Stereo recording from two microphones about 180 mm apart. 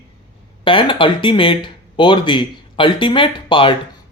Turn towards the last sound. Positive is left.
turn(degrees=30)  # may be behind; listen again after turning